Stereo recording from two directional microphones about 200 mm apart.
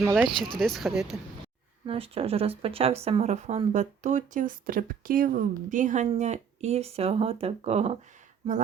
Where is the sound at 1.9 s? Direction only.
30° right (ahead or behind).